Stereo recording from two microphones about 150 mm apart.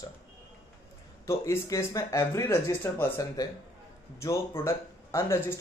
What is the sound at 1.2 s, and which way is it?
Speech, 20° left (ahead or behind).